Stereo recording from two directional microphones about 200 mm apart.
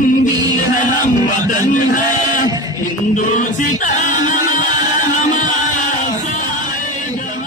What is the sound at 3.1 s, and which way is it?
Music, 40° left (ahead or behind).